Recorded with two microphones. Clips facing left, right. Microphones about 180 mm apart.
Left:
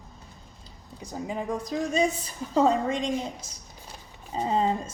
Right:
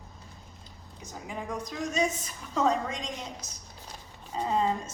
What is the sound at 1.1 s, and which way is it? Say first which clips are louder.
A woman's voice: left 6 dB; 30° left (ahead or behind).